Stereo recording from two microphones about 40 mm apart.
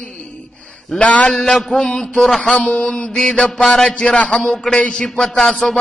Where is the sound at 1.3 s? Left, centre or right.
Centre.